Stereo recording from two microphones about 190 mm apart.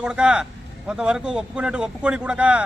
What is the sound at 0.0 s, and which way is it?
Speech, 5° right (ahead or behind).